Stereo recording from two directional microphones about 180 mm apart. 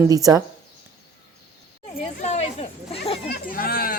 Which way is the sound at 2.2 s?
35° left (ahead or behind).